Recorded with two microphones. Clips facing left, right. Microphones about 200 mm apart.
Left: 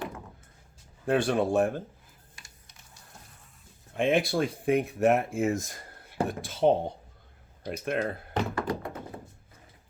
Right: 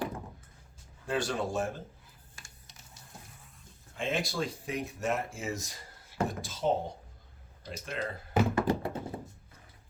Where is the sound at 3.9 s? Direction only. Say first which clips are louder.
Left 8 dB; 60° left (ahead or behind).